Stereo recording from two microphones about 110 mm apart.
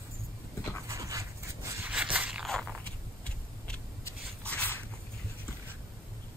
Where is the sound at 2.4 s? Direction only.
Centre (ahead or behind).